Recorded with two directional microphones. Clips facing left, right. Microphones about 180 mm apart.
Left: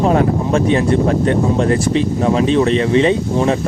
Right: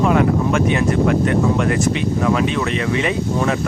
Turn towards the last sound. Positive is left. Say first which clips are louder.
# left 4 dB
turn(degrees=30)  # may be behind; listen again after turning